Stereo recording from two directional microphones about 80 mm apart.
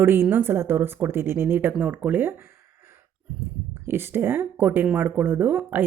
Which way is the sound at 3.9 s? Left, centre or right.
Right.